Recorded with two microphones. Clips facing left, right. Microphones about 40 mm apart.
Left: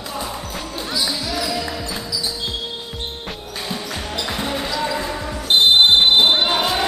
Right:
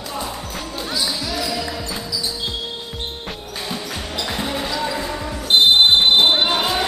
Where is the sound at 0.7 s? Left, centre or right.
Centre.